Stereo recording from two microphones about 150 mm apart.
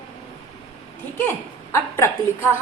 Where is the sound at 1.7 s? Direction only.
20° left (ahead or behind).